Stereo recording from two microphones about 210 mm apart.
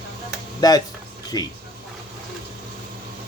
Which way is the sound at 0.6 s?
20° left (ahead or behind).